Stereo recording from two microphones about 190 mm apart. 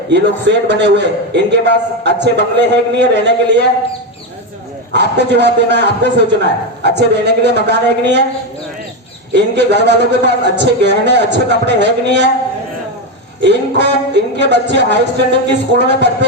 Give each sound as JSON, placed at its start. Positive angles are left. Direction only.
{"t": 0.1, "sound": "a man's voice", "side_deg": -65}
{"t": 4.9, "sound": "a man's voice", "side_deg": -65}
{"t": 9.3, "sound": "a man's voice", "side_deg": -65}
{"t": 13.4, "sound": "a man's voice", "side_deg": -65}